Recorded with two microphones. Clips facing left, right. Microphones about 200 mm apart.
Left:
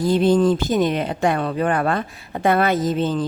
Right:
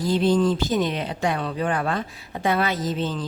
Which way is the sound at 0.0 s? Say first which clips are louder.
Left 4 dB; 55° left (ahead or behind).